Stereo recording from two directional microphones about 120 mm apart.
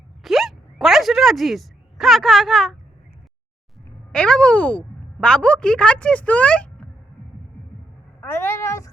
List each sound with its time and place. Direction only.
0.2 s a sound: centre (ahead or behind)
4.1 s speech: 5° left (ahead or behind)
8.2 s speech: 20° left (ahead or behind)